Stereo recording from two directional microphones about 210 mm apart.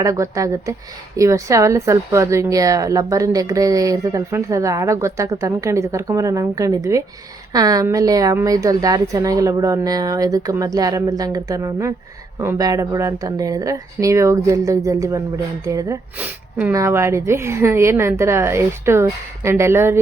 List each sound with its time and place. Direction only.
0.0 s speech: 15° right (ahead or behind)